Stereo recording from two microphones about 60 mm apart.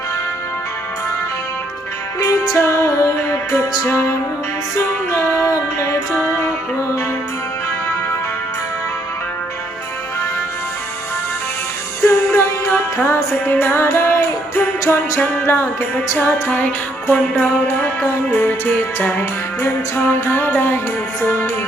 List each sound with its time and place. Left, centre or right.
2.2 s music: left
2.6 s music: left
3.8 s music: left
4.8 s music: left
12.0 s music: left
18.4 s music: left